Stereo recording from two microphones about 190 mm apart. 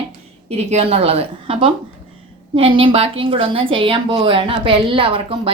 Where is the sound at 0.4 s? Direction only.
35° right (ahead or behind).